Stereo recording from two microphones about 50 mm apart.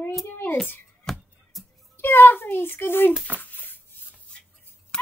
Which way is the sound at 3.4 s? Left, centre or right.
Left.